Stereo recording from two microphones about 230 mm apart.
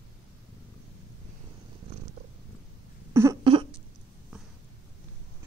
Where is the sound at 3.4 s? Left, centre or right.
Right.